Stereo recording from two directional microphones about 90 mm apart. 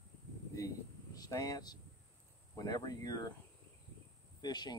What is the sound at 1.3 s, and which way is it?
Speech, 45° left (ahead or behind).